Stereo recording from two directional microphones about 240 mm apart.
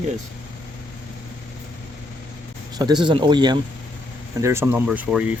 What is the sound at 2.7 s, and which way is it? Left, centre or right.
Speech, centre.